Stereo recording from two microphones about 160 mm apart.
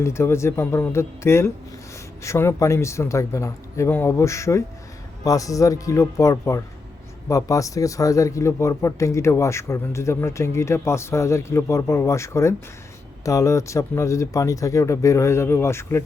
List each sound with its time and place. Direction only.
0.0 s speech: 15° left (ahead or behind)